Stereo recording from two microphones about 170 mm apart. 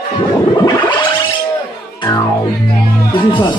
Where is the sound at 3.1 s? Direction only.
30° left (ahead or behind).